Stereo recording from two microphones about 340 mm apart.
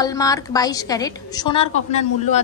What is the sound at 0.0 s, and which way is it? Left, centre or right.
A woman's voice, centre.